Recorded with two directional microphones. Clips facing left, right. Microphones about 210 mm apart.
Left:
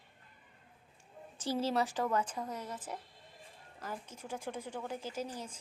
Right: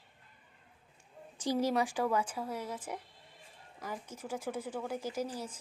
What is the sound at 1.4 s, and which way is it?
Speech, 15° right (ahead or behind).